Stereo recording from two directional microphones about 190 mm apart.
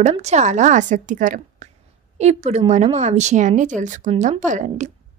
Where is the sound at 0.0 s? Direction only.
35° right (ahead or behind).